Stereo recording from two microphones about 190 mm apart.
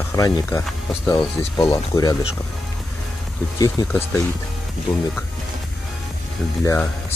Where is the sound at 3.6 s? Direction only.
20° left (ahead or behind).